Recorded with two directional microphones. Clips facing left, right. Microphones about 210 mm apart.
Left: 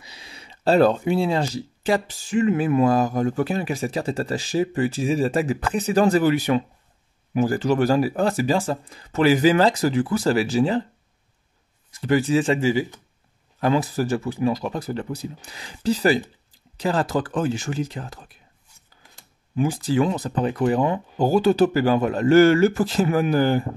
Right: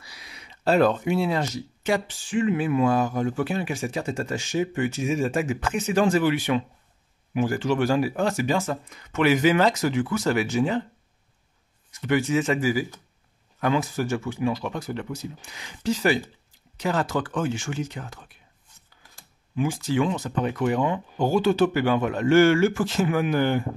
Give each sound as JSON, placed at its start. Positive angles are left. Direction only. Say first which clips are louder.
{"t": 0.0, "sound": "speech", "louder": "left 3 dB", "side_deg": 25}
{"t": 12.0, "sound": "speech", "louder": "left 3 dB", "side_deg": 35}
{"t": 19.5, "sound": "speech", "louder": "left 3 dB", "side_deg": 35}